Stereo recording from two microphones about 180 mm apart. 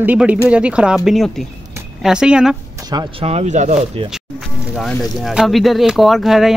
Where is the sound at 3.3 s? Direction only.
40° right (ahead or behind).